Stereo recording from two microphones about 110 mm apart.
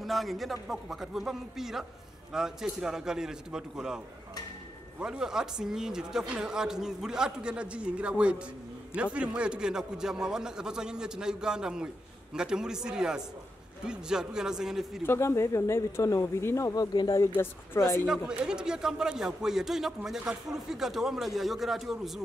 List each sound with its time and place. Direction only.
0.0 s speech: centre (ahead or behind)
5.0 s speech: 5° right (ahead or behind)
15.0 s speech: 25° left (ahead or behind)
17.4 s speech: 25° left (ahead or behind)
18.0 s speech: 5° right (ahead or behind)